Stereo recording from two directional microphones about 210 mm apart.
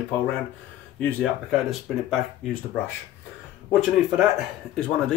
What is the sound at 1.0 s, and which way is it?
Speech, 5° left (ahead or behind).